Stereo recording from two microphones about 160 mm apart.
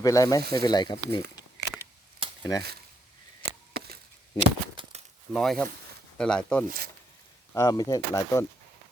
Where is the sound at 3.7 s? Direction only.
75° right (ahead or behind).